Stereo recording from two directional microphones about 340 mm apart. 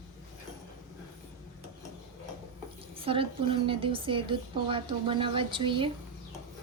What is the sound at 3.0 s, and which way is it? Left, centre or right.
A woman's voice, centre.